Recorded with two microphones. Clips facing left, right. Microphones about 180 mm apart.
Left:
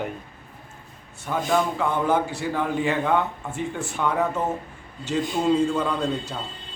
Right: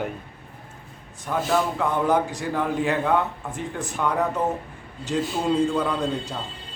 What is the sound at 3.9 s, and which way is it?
Speech, centre (ahead or behind).